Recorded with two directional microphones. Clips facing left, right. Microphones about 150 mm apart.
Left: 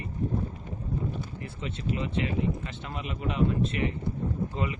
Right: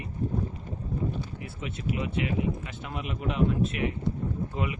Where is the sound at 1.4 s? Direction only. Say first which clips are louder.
Even; 10° right (ahead or behind).